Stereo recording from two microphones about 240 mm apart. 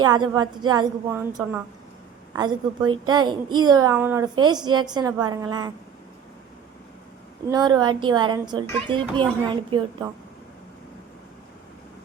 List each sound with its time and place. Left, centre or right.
0.0 s a woman's voice: centre
7.4 s a woman's voice: centre